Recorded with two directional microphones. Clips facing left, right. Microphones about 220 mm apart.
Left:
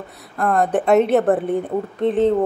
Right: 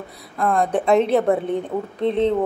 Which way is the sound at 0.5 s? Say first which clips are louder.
Left 2 dB; 5° left (ahead or behind).